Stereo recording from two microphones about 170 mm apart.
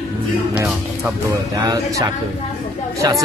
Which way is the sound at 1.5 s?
20° right (ahead or behind).